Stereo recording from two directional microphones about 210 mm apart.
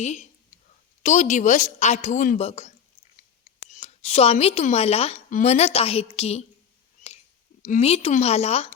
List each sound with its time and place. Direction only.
1.0 s a woman's voice: 35° left (ahead or behind)
3.8 s a woman's voice: 30° left (ahead or behind)
7.6 s a woman's voice: 35° left (ahead or behind)